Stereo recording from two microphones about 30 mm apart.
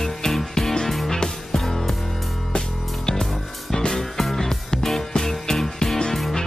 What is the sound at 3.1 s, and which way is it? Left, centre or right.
Music, centre.